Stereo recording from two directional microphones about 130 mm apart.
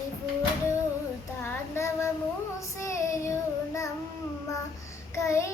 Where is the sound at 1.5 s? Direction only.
20° left (ahead or behind).